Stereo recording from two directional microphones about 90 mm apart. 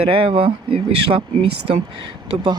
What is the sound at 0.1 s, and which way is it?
Speech, 85° right.